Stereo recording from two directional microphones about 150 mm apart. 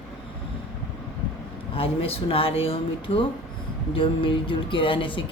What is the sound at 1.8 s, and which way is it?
Speech, 40° left (ahead or behind).